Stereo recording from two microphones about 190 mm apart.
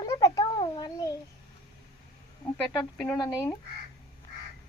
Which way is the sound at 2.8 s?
5° left (ahead or behind).